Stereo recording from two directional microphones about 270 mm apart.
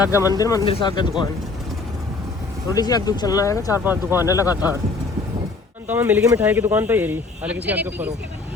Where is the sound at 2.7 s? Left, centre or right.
Centre.